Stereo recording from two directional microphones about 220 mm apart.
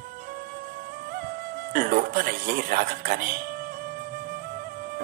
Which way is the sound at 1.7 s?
40° right (ahead or behind).